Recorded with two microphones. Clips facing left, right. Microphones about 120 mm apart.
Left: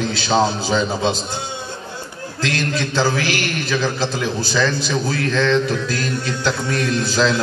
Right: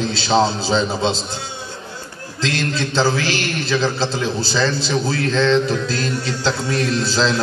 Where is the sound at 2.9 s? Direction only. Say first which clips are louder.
Right 1 dB; 25° right (ahead or behind).